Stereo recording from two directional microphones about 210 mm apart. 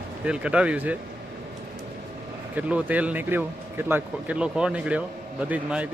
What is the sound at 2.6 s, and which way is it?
Speech, 5° right (ahead or behind).